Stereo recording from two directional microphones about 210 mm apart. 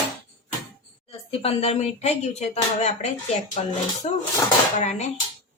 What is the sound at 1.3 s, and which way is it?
Speech, 30° left (ahead or behind).